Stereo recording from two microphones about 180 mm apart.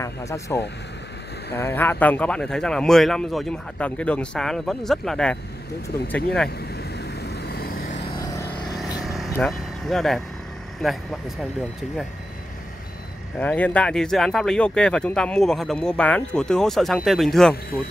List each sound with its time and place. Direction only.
0.0 s speech: 15° left (ahead or behind)
1.6 s speech: 10° left (ahead or behind)
6.7 s vehicle: 65° left (ahead or behind)
9.0 s vehicle: centre (ahead or behind)
9.3 s speech: centre (ahead or behind)
13.4 s speech: 10° left (ahead or behind)